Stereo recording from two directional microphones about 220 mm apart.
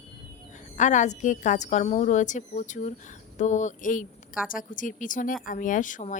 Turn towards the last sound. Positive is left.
turn(degrees=35)  # may be behind; listen again after turning